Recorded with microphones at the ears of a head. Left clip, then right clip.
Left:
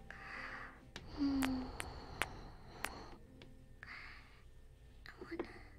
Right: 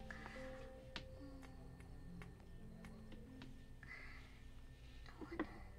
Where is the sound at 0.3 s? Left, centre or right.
Left.